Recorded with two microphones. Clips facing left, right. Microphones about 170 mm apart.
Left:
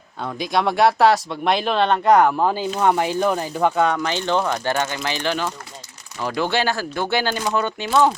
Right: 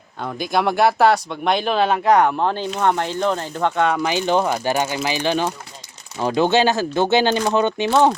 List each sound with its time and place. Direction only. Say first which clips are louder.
0.2 s speech: right 1 dB; centre (ahead or behind)
3.9 s speech: right 3 dB; 10° right (ahead or behind)